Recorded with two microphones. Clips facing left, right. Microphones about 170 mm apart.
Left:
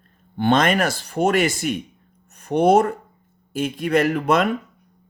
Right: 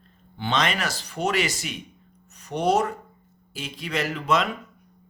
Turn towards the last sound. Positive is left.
turn(degrees=55)  # may be behind; listen again after turning